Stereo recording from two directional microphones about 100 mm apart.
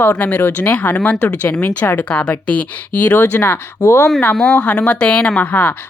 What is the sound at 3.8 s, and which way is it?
Speech, 30° left (ahead or behind).